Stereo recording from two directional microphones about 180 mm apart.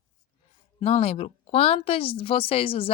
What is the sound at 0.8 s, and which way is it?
A woman's voice, 35° left (ahead or behind).